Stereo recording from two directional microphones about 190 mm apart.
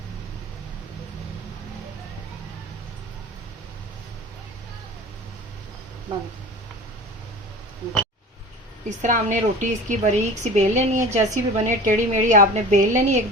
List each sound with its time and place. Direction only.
9.0 s a woman's voice: 40° right (ahead or behind)